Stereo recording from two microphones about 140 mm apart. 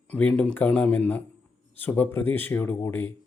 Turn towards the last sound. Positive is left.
turn(degrees=15)  # may be behind; listen again after turning